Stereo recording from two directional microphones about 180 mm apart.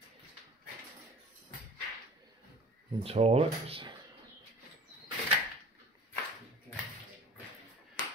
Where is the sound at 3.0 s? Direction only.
35° right (ahead or behind).